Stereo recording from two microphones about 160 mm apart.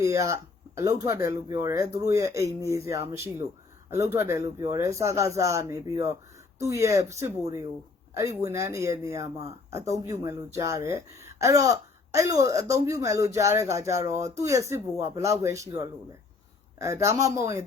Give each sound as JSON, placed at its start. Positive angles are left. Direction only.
{"t": 0.0, "sound": "a woman's voice", "side_deg": -20}